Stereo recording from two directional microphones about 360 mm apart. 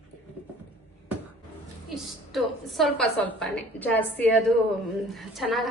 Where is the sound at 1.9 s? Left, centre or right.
Centre.